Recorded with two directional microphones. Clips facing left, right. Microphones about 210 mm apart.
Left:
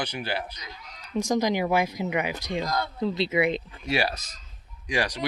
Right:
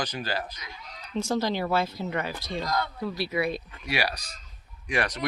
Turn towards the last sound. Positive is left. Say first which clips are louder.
# left 1 dB
turn(degrees=15)  # may be behind; listen again after turning